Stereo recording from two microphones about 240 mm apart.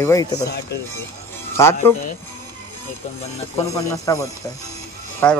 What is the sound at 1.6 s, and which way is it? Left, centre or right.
Speech, centre.